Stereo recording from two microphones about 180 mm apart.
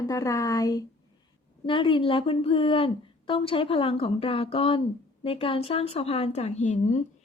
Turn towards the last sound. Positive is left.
turn(degrees=40)  # may be behind; listen again after turning